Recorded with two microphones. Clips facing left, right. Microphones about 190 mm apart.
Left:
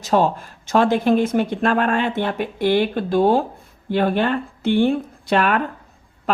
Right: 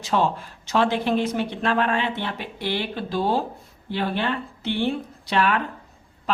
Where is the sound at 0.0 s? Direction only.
45° left (ahead or behind).